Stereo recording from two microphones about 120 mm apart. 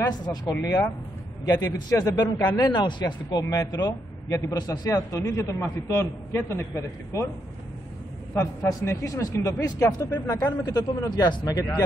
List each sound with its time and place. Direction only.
0.0 s a man's voice: 35° left (ahead or behind)
8.4 s a man's voice: 25° left (ahead or behind)